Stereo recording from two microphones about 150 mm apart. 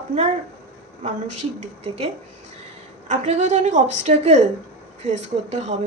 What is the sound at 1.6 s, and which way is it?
Speech, 45° right (ahead or behind).